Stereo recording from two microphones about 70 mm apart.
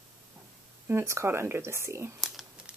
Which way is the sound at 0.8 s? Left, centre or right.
Right.